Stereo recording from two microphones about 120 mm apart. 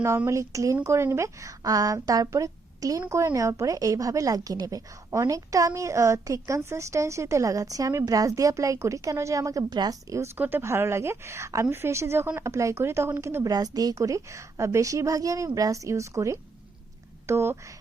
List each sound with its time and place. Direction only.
0.3 s speech: 25° right (ahead or behind)
10.3 s speech: 15° right (ahead or behind)